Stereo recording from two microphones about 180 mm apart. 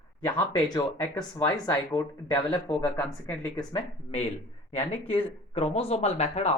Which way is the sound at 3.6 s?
30° left (ahead or behind).